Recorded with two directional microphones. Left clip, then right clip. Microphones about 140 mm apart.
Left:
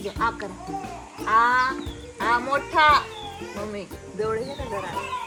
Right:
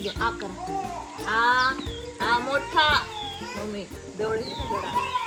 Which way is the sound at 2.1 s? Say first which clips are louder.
Left 2 dB; 40° left (ahead or behind).